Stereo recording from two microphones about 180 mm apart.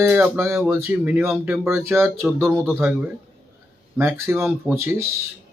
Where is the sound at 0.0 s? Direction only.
10° right (ahead or behind).